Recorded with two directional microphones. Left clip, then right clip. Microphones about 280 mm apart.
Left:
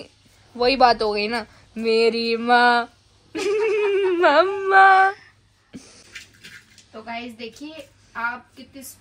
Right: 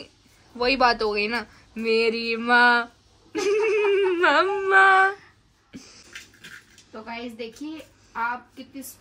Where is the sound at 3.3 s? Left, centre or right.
Centre.